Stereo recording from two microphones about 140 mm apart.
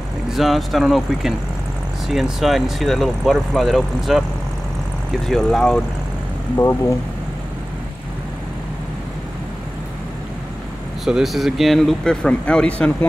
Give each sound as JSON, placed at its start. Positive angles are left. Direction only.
{"t": 0.3, "sound": "speech", "side_deg": 0}
{"t": 5.2, "sound": "speech", "side_deg": 0}
{"t": 6.5, "sound": "speech", "side_deg": 20}
{"t": 11.1, "sound": "speech", "side_deg": 0}